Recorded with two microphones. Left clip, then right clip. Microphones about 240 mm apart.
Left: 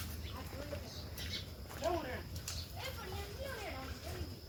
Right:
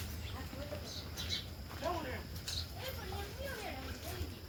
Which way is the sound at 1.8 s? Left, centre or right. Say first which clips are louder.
Left 2 dB; left.